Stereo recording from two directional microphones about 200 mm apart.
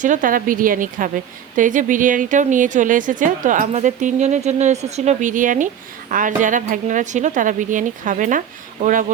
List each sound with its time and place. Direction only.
0.0 s a woman's voice: 40° right (ahead or behind)